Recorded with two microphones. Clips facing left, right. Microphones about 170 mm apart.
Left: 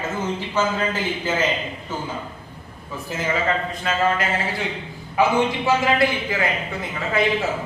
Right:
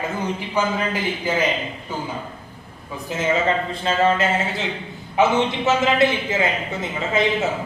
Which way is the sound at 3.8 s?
25° right (ahead or behind).